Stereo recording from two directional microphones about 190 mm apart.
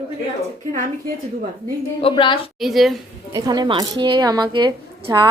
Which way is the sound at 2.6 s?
Centre (ahead or behind).